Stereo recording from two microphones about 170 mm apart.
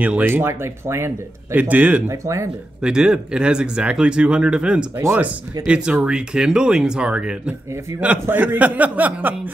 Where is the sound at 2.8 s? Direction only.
5° right (ahead or behind).